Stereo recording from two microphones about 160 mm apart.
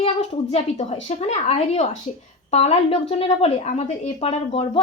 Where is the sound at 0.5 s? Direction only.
40° left (ahead or behind).